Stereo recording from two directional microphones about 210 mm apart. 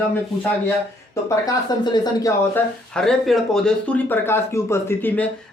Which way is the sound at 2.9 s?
5° left (ahead or behind).